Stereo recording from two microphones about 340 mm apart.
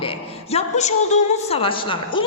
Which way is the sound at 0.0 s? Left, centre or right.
Centre.